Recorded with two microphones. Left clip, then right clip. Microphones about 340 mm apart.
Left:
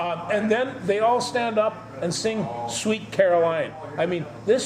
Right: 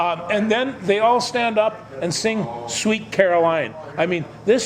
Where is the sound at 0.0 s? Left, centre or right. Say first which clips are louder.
Right 4 dB; right.